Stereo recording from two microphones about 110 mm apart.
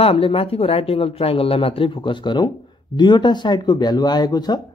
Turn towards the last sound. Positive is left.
turn(degrees=40)  # may be behind; listen again after turning